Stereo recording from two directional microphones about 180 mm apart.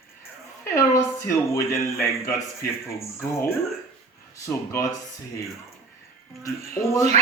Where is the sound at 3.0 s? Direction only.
15° left (ahead or behind).